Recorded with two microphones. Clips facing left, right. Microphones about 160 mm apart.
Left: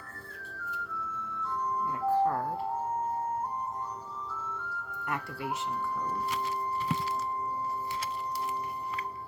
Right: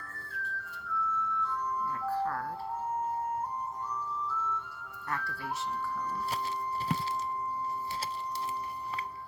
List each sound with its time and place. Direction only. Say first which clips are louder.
2.0 s ice cream truck: left 7 dB; 20° left (ahead or behind)
5.0 s music: left 1 dB; 15° left (ahead or behind)